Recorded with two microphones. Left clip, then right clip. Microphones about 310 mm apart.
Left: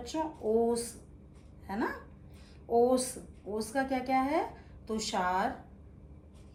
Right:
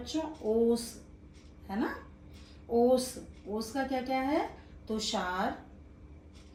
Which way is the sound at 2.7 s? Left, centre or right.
Left.